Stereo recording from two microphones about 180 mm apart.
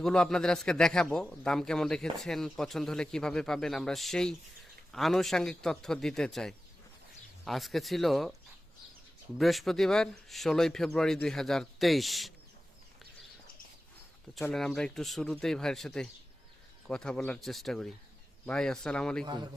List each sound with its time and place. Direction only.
0.0 s a man's voice: 5° left (ahead or behind)
9.4 s a man's voice: centre (ahead or behind)
14.4 s a man's voice: 5° left (ahead or behind)
19.2 s a man's voice: 25° right (ahead or behind)